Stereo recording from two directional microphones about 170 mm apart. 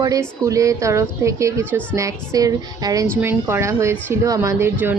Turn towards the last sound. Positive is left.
turn(degrees=-15)  # may be behind; listen again after turning